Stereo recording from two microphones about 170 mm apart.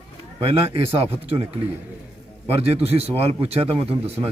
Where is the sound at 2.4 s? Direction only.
35° right (ahead or behind).